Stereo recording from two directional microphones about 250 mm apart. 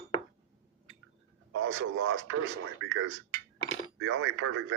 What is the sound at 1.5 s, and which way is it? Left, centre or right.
Speech, right.